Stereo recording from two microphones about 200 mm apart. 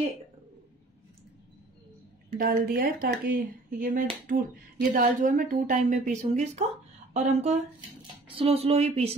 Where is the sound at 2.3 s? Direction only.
45° right (ahead or behind).